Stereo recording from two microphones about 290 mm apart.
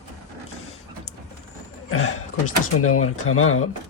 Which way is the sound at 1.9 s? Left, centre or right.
Left.